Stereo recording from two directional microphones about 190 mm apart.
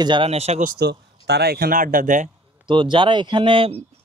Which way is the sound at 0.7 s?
60° right (ahead or behind).